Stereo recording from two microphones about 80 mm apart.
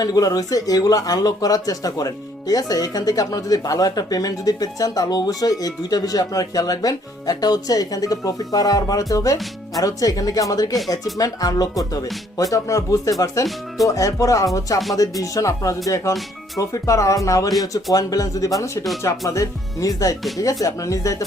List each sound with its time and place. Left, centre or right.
0.0 s speech: left